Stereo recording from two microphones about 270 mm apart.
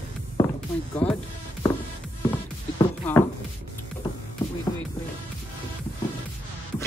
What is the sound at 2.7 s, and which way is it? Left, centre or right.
Music, centre.